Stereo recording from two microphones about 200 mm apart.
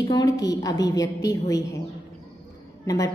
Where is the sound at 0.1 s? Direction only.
20° left (ahead or behind).